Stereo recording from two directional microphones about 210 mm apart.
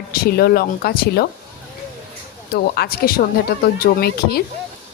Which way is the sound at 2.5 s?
50° left (ahead or behind).